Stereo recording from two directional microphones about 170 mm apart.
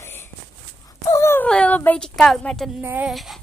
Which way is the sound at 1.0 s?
15° left (ahead or behind).